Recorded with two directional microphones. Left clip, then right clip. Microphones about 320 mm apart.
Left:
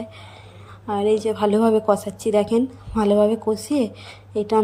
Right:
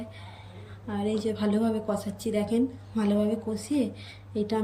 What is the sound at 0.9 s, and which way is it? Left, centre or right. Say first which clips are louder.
A woman's voice: left 10 dB; centre.